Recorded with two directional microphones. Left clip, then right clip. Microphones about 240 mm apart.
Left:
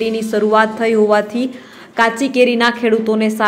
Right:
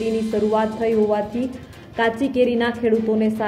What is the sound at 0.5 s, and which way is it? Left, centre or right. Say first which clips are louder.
Speech: left 9 dB; centre.